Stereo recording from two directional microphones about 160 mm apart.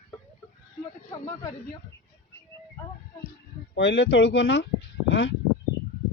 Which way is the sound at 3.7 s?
90° left.